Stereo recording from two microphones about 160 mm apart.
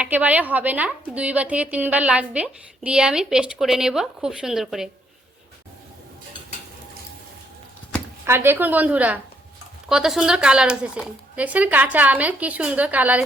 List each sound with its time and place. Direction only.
0.0 s a woman's voice: 10° right (ahead or behind)
8.3 s a woman's voice: 15° right (ahead or behind)